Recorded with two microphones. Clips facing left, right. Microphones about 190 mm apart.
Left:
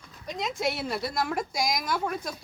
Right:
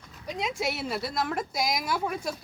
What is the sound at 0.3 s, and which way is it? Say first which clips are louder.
A woman's voice: left 1 dB; 5° right (ahead or behind).